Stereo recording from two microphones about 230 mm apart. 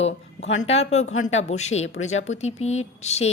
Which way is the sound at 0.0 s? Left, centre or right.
Left.